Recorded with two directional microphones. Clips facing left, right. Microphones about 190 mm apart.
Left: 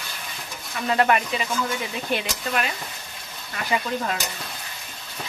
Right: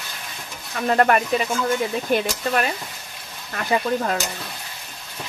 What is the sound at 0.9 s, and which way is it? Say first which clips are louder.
Speech: right 3 dB; 45° right (ahead or behind).